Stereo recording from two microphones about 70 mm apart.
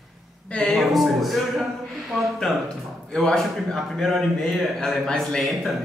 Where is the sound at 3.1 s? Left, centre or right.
Centre.